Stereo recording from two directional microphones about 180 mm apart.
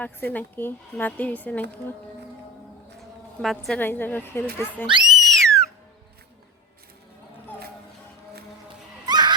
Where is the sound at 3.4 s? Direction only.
Centre (ahead or behind).